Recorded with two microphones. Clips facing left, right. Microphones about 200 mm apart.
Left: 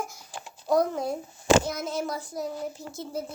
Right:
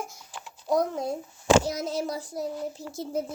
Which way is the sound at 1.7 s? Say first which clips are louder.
Right 1 dB; 35° right (ahead or behind).